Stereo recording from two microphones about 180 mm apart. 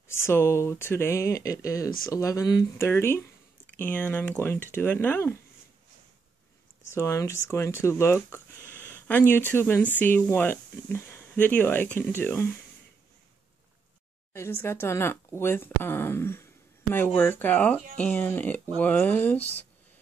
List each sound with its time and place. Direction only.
0.1 s speech: 15° left (ahead or behind)
6.9 s speech: 15° left (ahead or behind)
8.8 s a sound: 10° left (ahead or behind)
9.5 s speech: 10° left (ahead or behind)
14.3 s speech: 15° left (ahead or behind)